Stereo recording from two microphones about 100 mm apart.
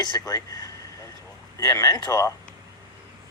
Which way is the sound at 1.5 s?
40° left (ahead or behind).